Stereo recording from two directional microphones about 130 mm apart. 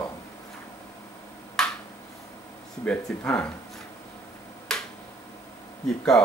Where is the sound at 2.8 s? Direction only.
10° left (ahead or behind).